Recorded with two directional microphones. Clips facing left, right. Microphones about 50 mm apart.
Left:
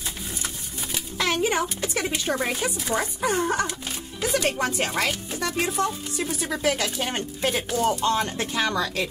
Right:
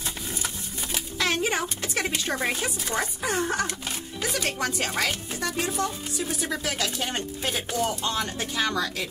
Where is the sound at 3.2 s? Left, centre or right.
Left.